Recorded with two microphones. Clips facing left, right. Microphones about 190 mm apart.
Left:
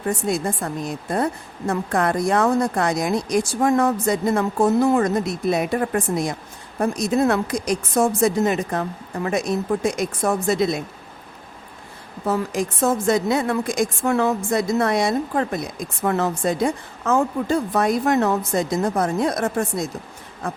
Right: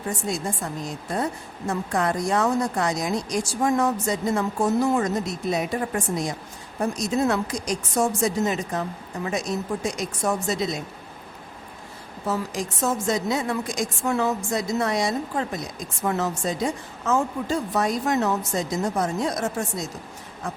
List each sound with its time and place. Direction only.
0.3 s a woman's voice: 60° left (ahead or behind)
12.2 s a woman's voice: 55° left (ahead or behind)